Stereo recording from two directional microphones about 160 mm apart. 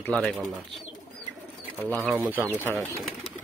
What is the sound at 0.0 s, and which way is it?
Speech, 10° left (ahead or behind).